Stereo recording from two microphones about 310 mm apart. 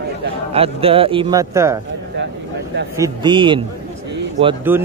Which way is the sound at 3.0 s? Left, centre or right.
Centre.